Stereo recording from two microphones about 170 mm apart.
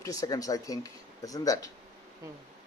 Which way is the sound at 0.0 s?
20° left (ahead or behind).